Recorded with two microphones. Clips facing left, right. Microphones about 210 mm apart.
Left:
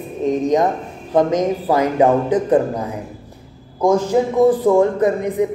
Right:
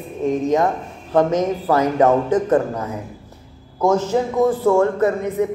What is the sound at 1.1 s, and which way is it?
A woman's voice, 15° left (ahead or behind).